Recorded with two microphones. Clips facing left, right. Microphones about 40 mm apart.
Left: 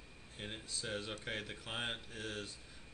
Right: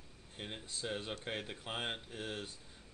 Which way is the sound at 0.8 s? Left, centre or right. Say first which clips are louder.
Right 2 dB; centre.